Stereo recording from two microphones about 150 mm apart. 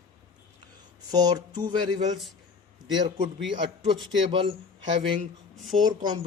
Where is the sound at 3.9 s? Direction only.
35° right (ahead or behind).